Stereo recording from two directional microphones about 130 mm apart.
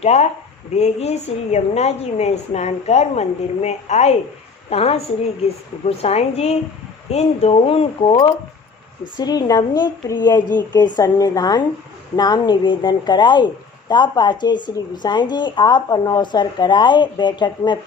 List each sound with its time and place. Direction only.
0.0 s a woman's voice: 55° left (ahead or behind)
9.1 s speech: 30° left (ahead or behind)
10.2 s speech: 20° left (ahead or behind)
10.7 s speech: 30° left (ahead or behind)